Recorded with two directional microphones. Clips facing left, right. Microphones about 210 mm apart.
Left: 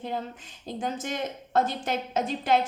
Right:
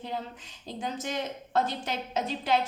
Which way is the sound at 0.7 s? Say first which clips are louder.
Left 2 dB; 50° left (ahead or behind).